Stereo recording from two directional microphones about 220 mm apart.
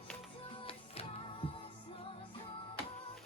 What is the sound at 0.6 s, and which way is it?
Music, 25° left (ahead or behind).